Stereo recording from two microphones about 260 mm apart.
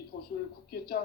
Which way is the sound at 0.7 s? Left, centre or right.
Left.